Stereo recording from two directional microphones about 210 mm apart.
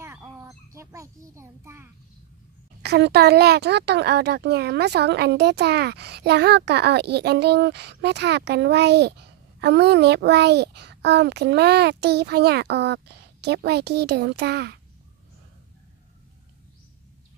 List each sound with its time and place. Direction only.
0.0 s fowl: 15° right (ahead or behind)
2.8 s speech: 50° right (ahead or behind)